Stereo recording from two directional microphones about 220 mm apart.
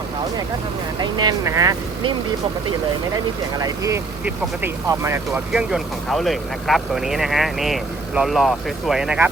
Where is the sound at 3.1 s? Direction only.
15° right (ahead or behind).